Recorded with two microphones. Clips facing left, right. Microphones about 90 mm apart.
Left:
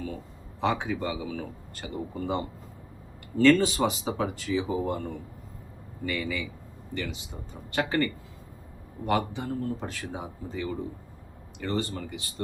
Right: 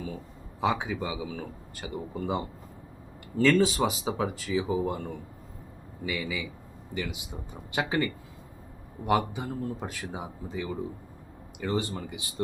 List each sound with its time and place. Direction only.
0.6 s speech: 5° right (ahead or behind)